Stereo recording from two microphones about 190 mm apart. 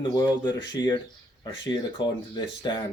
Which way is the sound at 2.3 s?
25° left (ahead or behind).